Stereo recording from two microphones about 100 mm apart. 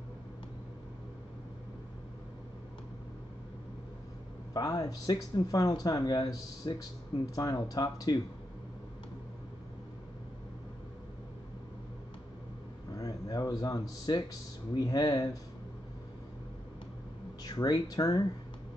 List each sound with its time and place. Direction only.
4.6 s speech: 35° left (ahead or behind)
12.9 s a sound: 35° left (ahead or behind)
14.7 s speech: 40° left (ahead or behind)
17.4 s speech: 40° left (ahead or behind)